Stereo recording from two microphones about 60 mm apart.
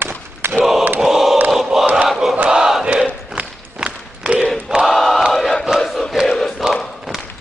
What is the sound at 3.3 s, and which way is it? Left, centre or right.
Walk, centre.